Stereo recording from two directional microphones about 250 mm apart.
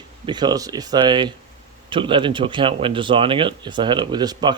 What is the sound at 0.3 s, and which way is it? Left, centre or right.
Speech, centre.